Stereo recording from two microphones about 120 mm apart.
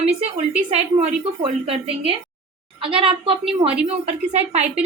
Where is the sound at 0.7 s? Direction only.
55° right (ahead or behind).